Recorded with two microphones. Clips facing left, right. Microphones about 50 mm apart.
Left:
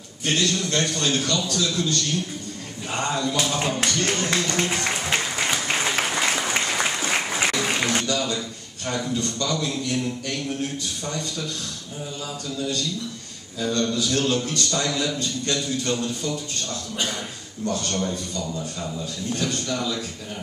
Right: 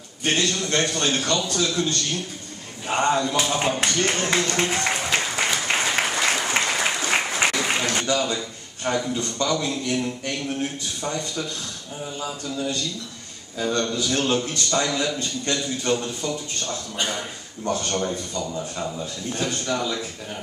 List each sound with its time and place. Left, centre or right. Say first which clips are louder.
0.2 s a man's voice: even; right
5.4 s applause: right 1 dB; centre
7.5 s a sound: right 1 dB; centre
8.0 s a man's voice: right 2 dB; centre
17.6 s a man's voice: right 1 dB; right